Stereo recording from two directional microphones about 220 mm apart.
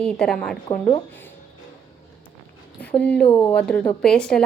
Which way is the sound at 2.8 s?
5° left (ahead or behind).